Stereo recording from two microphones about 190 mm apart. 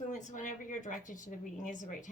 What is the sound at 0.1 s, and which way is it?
A woman's voice, 40° left (ahead or behind).